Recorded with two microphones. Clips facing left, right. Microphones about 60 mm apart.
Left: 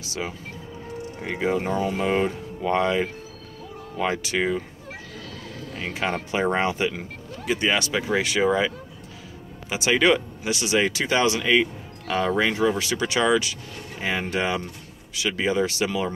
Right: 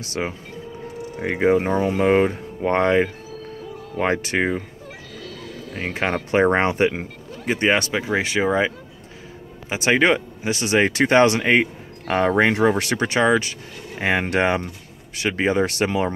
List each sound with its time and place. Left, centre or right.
0.0 s speech: right
5.9 s speech: right
7.9 s speech: right
9.8 s speech: right
13.0 s speech: right
13.9 s speech: right